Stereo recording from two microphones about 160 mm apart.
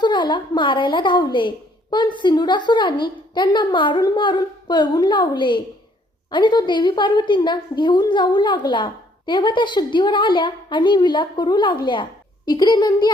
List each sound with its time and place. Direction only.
0.0 s a woman's voice: 30° left (ahead or behind)